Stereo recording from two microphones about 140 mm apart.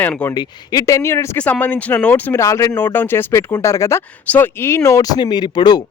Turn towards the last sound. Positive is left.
turn(degrees=30)  # may be behind; listen again after turning